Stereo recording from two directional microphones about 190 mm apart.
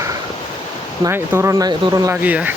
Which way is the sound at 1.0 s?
15° right (ahead or behind).